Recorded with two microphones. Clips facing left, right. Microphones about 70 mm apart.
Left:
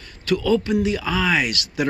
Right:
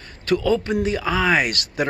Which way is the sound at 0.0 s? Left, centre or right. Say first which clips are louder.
Right 1 dB; right.